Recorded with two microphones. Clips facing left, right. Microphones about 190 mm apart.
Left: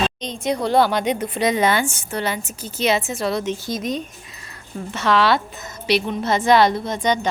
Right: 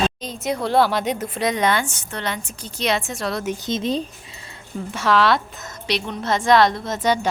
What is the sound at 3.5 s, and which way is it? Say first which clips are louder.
Speech: right 1 dB; 20° right (ahead or behind).